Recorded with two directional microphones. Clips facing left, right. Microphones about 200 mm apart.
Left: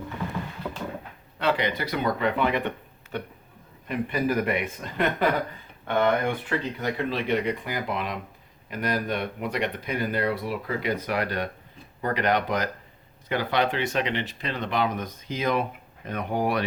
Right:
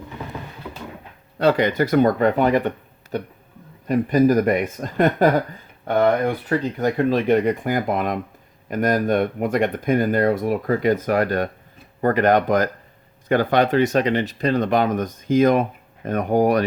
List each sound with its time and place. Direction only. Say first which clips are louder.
1.4 s speech: right 8 dB; 45° right (ahead or behind)